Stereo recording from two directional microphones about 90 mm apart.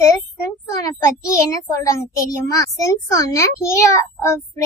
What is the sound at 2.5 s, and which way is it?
A child's voice, 40° left (ahead or behind).